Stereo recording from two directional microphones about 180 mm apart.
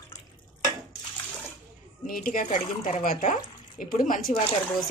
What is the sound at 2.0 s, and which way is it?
Speech, 50° left (ahead or behind).